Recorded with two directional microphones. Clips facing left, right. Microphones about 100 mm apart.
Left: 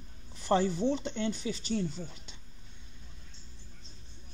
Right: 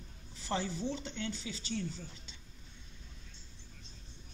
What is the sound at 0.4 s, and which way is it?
Speech, 50° left (ahead or behind).